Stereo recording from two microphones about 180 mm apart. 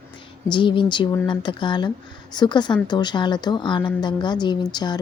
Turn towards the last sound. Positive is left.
turn(degrees=25)  # may be behind; listen again after turning